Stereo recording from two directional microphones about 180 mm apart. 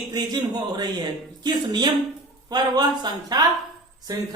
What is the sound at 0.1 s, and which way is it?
Speech, 20° right (ahead or behind).